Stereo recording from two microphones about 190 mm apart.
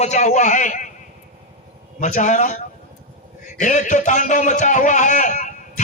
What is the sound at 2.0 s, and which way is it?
Speech, 40° left (ahead or behind).